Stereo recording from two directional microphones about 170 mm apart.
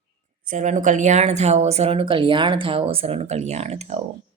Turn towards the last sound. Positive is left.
turn(degrees=-40)  # may be behind; listen again after turning